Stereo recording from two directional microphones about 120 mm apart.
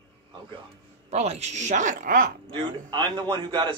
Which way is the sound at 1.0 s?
65° right (ahead or behind).